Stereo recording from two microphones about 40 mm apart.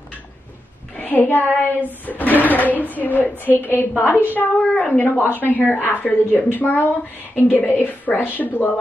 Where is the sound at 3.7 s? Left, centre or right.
Left.